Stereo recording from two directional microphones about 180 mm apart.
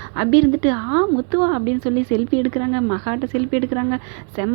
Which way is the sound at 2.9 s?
30° right (ahead or behind).